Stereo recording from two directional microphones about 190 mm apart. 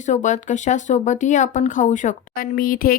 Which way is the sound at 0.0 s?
40° left (ahead or behind).